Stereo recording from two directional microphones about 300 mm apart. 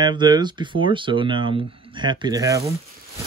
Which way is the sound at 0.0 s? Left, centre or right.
Centre.